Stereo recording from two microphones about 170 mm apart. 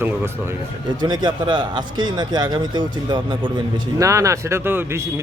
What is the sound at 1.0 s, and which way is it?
A man's voice, 25° right (ahead or behind).